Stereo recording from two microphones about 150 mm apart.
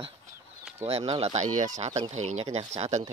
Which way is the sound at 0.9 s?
45° right (ahead or behind).